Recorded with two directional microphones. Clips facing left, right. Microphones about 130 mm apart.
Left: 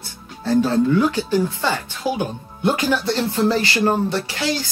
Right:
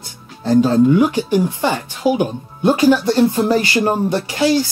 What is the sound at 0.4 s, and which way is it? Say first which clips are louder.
Speech: right 5 dB; 15° right (ahead or behind).